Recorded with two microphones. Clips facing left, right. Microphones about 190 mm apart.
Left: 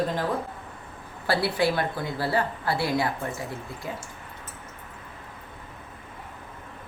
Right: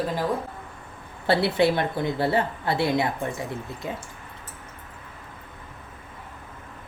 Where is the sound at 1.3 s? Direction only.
25° right (ahead or behind).